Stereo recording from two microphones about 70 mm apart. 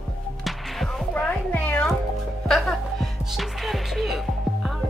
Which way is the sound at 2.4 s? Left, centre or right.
Centre.